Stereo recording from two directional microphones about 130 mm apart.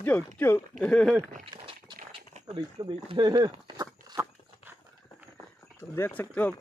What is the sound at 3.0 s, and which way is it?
Speech, 35° right (ahead or behind).